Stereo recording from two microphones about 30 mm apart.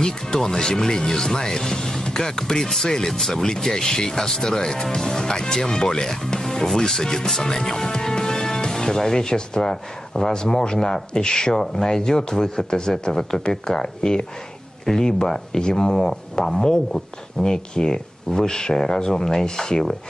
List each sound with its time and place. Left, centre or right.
0.0 s speech: centre